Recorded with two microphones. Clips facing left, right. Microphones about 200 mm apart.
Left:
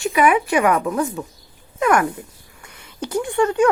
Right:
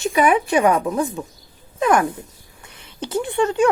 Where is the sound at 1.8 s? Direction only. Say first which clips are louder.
Even; 20° right (ahead or behind).